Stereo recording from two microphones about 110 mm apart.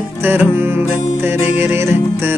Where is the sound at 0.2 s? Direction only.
20° right (ahead or behind).